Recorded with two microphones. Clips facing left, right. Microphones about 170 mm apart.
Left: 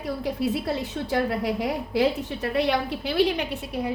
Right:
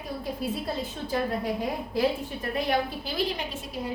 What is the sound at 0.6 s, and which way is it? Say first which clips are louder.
A woman's voice: left 4 dB; 75° left (ahead or behind).